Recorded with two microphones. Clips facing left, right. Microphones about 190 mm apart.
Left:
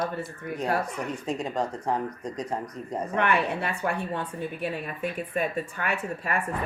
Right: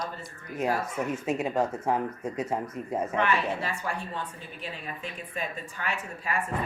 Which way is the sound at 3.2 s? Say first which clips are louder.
Left 4 dB; 60° left (ahead or behind).